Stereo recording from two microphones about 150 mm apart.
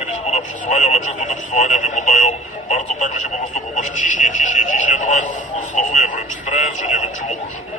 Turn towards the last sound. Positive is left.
turn(degrees=55)  # may be behind; listen again after turning